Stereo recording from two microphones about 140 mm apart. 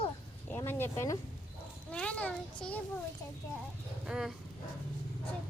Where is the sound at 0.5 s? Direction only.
15° left (ahead or behind).